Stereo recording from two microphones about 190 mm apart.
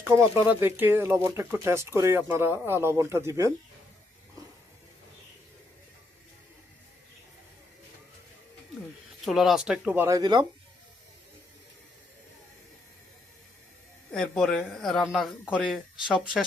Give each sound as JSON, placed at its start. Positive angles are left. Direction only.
{"t": 0.0, "sound": "speech", "side_deg": -15}
{"t": 9.2, "sound": "speech", "side_deg": 0}
{"t": 10.2, "sound": "speech", "side_deg": -25}
{"t": 14.1, "sound": "speech", "side_deg": 0}